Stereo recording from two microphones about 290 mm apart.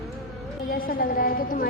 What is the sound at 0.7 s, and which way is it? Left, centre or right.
Speech, left.